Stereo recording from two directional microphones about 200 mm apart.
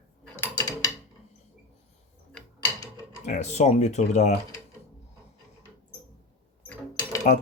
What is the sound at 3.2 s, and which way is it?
Speech, 35° left (ahead or behind).